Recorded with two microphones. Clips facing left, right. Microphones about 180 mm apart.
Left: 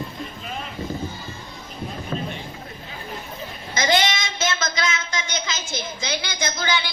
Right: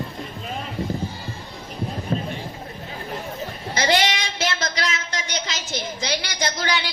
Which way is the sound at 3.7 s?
35° right (ahead or behind).